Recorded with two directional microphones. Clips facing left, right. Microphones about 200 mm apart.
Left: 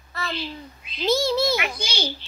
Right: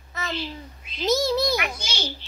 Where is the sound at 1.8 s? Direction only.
10° left (ahead or behind).